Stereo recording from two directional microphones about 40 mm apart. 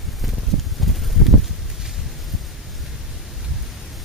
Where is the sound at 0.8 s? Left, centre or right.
Centre.